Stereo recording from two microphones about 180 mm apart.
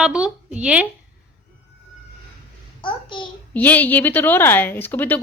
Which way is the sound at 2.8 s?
25° left (ahead or behind).